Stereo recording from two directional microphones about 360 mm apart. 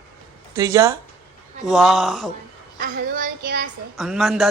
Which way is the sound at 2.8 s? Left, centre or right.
Right.